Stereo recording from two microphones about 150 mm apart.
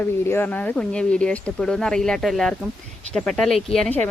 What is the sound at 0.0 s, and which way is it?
Speech, 15° left (ahead or behind).